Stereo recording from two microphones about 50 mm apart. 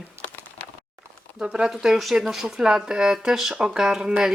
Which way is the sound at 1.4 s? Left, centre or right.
Right.